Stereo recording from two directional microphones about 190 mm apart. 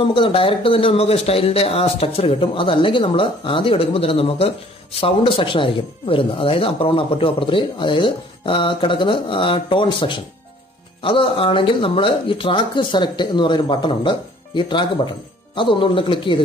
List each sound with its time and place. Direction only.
0.0 s speech: 25° left (ahead or behind)